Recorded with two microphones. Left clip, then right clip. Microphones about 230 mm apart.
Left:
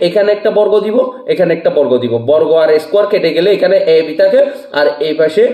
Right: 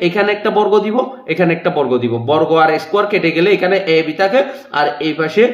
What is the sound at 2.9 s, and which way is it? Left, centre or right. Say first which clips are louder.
A man's voice: left 3 dB; right.